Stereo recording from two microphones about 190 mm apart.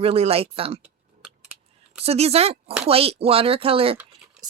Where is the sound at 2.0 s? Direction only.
35° right (ahead or behind).